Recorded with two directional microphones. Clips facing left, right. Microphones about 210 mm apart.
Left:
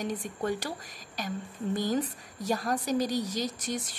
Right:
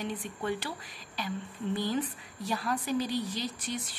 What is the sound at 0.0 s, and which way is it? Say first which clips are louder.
Speech: left 3 dB; 45° left (ahead or behind).